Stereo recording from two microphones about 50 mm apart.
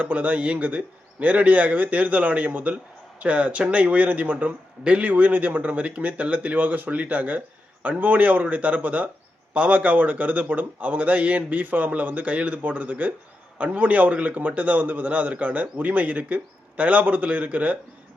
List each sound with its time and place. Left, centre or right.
0.0 s speech: right